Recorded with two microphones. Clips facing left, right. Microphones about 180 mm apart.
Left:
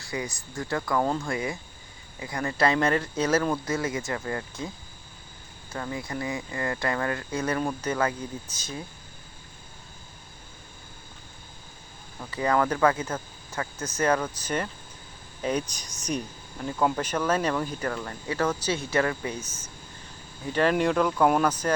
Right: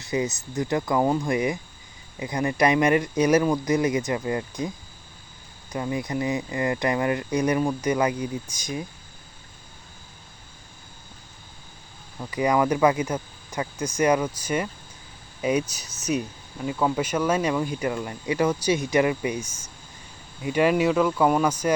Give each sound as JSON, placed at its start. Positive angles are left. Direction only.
{"t": 0.0, "sound": "speech", "side_deg": -20}
{"t": 5.7, "sound": "speech", "side_deg": -15}
{"t": 12.3, "sound": "speech", "side_deg": -15}